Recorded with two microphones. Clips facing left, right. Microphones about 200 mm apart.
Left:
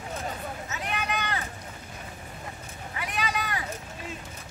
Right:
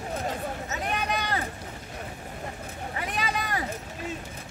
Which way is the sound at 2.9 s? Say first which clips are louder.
Even; 40° right (ahead or behind).